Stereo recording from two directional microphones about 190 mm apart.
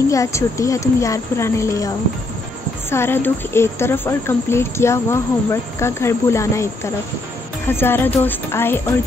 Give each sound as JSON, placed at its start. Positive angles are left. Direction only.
{"t": 0.1, "sound": "speech", "side_deg": 15}
{"t": 2.9, "sound": "speech", "side_deg": 10}